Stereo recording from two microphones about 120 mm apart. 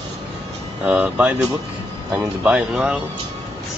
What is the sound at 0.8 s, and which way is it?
Speech, 10° right (ahead or behind).